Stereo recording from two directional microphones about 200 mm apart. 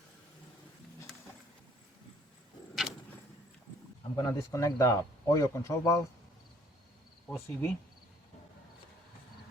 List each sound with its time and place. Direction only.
4.1 s speech: 15° left (ahead or behind)
7.3 s speech: 10° left (ahead or behind)